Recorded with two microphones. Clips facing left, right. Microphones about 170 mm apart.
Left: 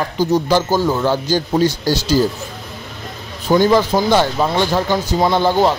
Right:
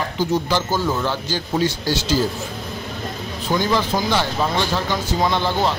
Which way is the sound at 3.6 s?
50° left (ahead or behind).